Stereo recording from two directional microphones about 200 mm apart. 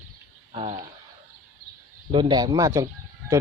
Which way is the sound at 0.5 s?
30° right (ahead or behind).